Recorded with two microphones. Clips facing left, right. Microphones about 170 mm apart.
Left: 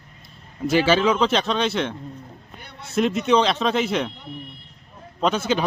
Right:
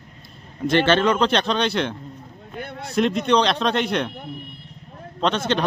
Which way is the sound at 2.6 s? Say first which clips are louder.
Right 13 dB; 55° right (ahead or behind).